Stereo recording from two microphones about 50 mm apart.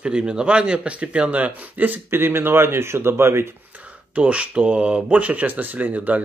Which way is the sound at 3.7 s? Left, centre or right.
Right.